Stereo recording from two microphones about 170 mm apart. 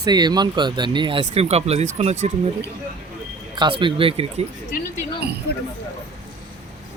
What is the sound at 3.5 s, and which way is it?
Speech, 30° right (ahead or behind).